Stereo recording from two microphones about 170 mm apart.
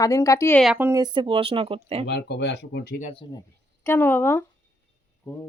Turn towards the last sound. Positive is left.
turn(degrees=15)  # may be behind; listen again after turning